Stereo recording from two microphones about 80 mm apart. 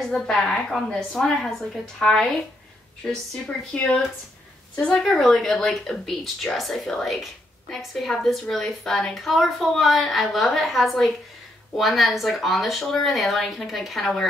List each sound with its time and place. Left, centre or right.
0.0 s a woman's voice: centre